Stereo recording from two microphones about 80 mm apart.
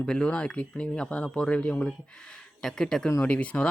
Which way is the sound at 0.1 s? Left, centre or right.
Centre.